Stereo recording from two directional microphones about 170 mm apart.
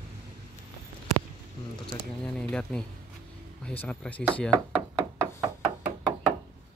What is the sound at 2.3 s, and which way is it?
Speech, 5° left (ahead or behind).